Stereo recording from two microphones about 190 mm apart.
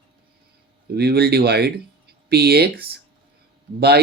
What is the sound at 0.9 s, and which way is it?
Speech, 55° right (ahead or behind).